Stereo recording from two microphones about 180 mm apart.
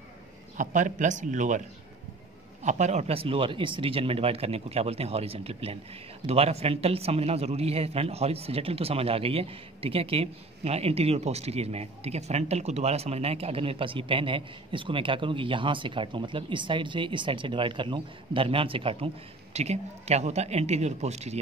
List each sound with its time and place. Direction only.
0.6 s a man's voice: 45° right (ahead or behind)
2.6 s a man's voice: 40° right (ahead or behind)